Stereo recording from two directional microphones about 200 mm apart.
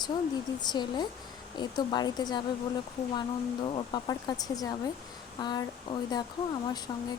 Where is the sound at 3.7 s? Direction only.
20° left (ahead or behind).